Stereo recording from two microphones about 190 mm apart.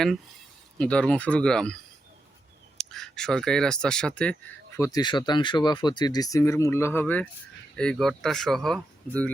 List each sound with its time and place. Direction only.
0.8 s speech: 5° left (ahead or behind)
4.8 s speech: 20° left (ahead or behind); by 9.3 s 5° left (ahead or behind)